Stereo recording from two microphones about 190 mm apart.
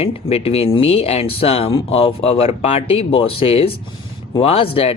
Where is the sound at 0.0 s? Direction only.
30° left (ahead or behind).